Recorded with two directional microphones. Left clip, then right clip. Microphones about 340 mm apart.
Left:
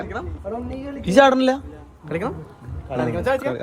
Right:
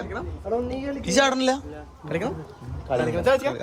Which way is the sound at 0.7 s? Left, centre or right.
Centre.